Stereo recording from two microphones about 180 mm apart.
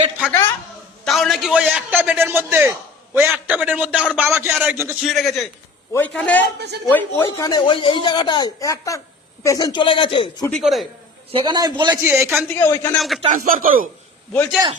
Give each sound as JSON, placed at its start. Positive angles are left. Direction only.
{"t": 0.2, "sound": "a woman's voice", "side_deg": 5}
{"t": 5.0, "sound": "a man's voice", "side_deg": 0}
{"t": 10.5, "sound": "a man's voice", "side_deg": 0}
{"t": 11.3, "sound": "a man's voice", "side_deg": -25}
{"t": 12.5, "sound": "a man's voice", "side_deg": 15}
{"t": 13.0, "sound": "a man's voice", "side_deg": 0}
{"t": 13.3, "sound": "speech", "side_deg": -50}